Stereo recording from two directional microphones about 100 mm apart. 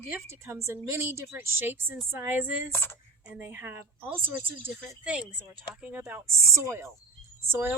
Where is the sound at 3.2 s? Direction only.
15° right (ahead or behind).